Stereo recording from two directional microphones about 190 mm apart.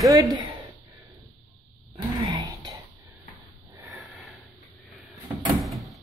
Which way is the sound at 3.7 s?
10° right (ahead or behind).